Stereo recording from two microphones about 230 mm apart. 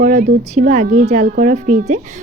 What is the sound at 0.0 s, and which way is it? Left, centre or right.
A woman's voice, right.